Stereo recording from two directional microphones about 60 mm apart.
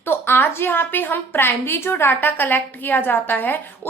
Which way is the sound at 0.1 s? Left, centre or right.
Left.